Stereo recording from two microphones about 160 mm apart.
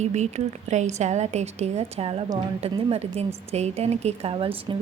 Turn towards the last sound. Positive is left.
turn(degrees=-35)  # may be behind; listen again after turning